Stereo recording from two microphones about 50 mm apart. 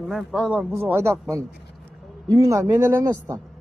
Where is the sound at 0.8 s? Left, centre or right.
Right.